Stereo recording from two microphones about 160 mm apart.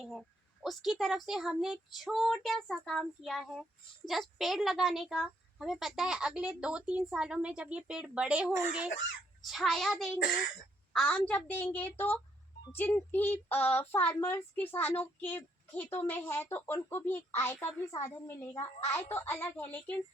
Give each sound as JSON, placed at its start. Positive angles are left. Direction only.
{"t": 0.0, "sound": "a child's voice", "side_deg": 0}
{"t": 10.2, "sound": "speech", "side_deg": 60}
{"t": 10.9, "sound": "speech", "side_deg": 5}